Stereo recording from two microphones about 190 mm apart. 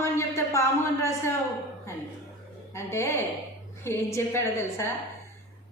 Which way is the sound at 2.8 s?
15° left (ahead or behind).